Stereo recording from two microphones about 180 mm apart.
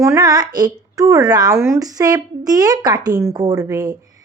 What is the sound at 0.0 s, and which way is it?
A woman's voice, 20° right (ahead or behind).